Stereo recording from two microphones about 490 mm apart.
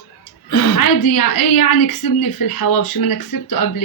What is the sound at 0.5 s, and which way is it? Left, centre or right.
A woman's voice, left.